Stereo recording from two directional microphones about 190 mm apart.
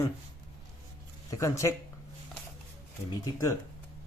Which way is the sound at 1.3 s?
15° left (ahead or behind).